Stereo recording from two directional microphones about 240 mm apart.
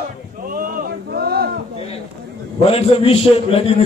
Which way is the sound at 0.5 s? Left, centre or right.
Right.